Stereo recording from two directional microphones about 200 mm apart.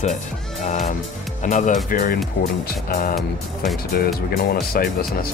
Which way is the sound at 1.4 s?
40° left (ahead or behind).